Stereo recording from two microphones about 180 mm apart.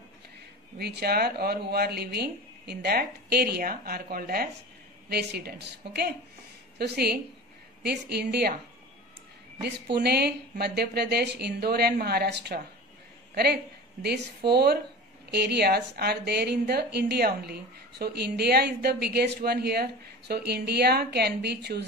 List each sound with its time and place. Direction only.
0.7 s a woman's voice: 65° right (ahead or behind)
9.9 s a woman's voice: 65° right (ahead or behind)